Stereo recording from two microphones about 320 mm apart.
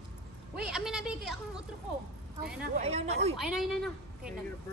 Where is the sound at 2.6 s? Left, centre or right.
Right.